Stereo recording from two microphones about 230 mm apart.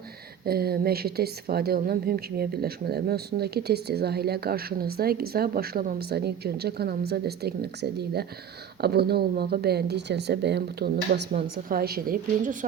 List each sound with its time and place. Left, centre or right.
0.4 s a woman's voice: right